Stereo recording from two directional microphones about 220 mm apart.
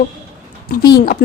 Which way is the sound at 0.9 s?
40° left (ahead or behind).